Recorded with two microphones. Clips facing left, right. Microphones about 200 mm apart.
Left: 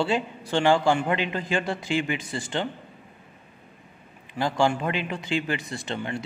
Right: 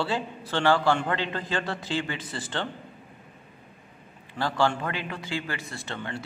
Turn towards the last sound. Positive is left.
turn(degrees=15)  # may be behind; listen again after turning